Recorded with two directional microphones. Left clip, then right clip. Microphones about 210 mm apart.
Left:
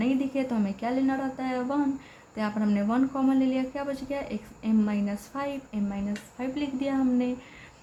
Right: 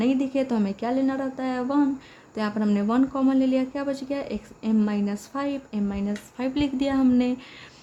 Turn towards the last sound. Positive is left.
turn(degrees=-45)  # may be behind; listen again after turning